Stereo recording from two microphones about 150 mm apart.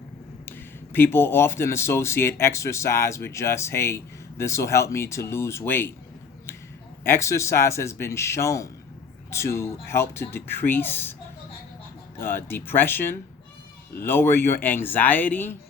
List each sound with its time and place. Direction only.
0.9 s speech: 15° left (ahead or behind)
7.0 s a man's voice: 20° left (ahead or behind)
12.1 s speech: 15° left (ahead or behind)